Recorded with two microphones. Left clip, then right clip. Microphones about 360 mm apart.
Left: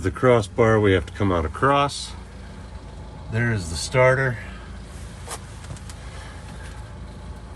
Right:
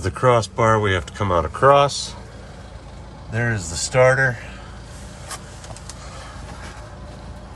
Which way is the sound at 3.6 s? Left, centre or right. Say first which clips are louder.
Right 3 dB; right.